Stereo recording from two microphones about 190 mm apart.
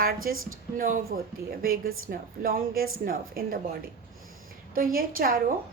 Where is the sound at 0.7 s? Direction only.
45° right (ahead or behind).